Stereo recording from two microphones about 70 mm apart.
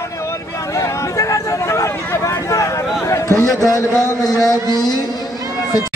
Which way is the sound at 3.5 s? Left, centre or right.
Left.